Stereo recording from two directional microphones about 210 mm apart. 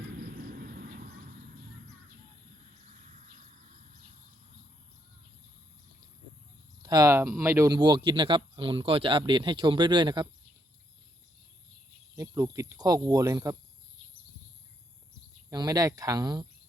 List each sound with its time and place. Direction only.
0.3 s vehicle: 45° right (ahead or behind)
2.9 s a sound: 35° right (ahead or behind)
6.8 s speech: 15° right (ahead or behind)
12.1 s speech: 15° right (ahead or behind)
15.4 s speech: 15° right (ahead or behind)